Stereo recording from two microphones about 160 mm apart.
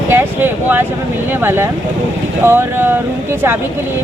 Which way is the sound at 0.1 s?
15° right (ahead or behind).